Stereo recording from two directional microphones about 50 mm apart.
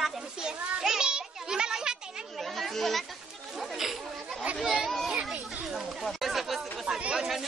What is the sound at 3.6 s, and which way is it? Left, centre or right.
Music, centre.